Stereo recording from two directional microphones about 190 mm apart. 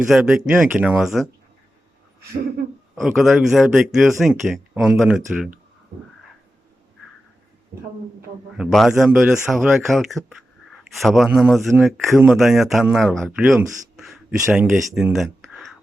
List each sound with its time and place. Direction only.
0.1 s a man's voice: 5° right (ahead or behind)
2.9 s a man's voice: centre (ahead or behind)
7.7 s speech: 55° right (ahead or behind)
8.5 s a man's voice: centre (ahead or behind)